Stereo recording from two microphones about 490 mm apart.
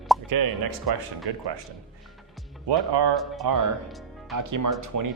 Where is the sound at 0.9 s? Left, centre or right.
Right.